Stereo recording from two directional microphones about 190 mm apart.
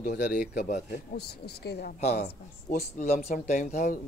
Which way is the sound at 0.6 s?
40° left (ahead or behind).